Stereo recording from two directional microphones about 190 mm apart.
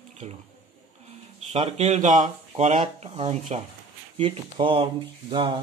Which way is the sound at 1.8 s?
40° right (ahead or behind).